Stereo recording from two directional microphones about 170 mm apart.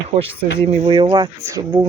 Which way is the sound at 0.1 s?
35° right (ahead or behind).